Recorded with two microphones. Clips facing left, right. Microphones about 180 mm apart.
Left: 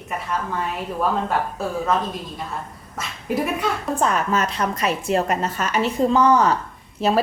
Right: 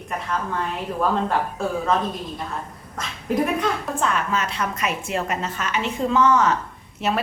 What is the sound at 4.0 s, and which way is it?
A woman's voice, 40° left (ahead or behind).